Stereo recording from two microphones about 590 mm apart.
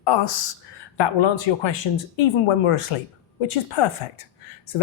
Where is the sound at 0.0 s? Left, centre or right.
Left.